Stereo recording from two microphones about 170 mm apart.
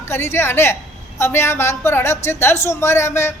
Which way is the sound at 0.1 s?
15° left (ahead or behind).